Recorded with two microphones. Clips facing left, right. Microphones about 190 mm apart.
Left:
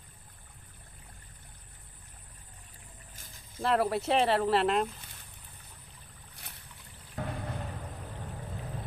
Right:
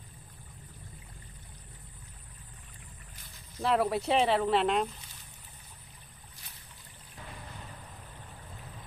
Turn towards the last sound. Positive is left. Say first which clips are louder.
# left 10 dB
turn(degrees=60)  # may be behind; listen again after turning